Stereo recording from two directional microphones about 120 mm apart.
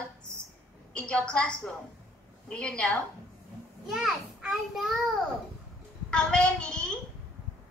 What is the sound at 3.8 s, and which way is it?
A child's voice, 5° right (ahead or behind).